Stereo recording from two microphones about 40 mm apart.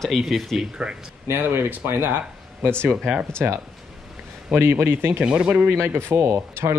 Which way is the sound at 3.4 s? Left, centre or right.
Right.